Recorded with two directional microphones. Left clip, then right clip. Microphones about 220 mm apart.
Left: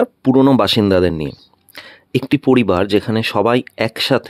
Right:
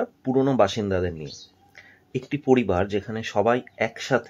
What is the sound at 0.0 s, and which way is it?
Speech, 40° left (ahead or behind).